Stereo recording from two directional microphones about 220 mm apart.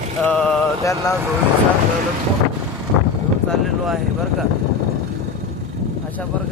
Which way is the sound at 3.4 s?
Centre (ahead or behind).